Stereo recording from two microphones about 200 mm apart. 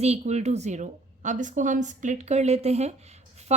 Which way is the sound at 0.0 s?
35° right (ahead or behind).